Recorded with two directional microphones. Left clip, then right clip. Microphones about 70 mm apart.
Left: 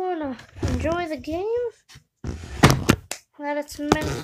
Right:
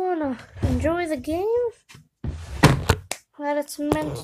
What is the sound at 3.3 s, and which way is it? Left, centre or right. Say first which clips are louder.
Speech: right 2 dB; centre.